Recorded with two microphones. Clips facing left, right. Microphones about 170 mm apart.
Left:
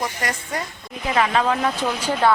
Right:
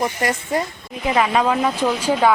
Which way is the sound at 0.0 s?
25° right (ahead or behind).